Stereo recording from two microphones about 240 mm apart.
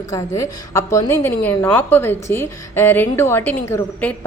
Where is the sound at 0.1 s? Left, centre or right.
Centre.